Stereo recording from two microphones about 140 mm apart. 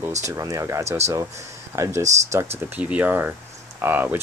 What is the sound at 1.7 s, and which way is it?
Speech, 20° right (ahead or behind).